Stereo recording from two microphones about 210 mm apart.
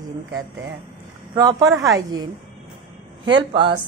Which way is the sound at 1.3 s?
15° right (ahead or behind).